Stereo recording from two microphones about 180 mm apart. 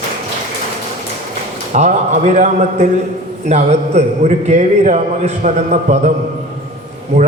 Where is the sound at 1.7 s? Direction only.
45° right (ahead or behind).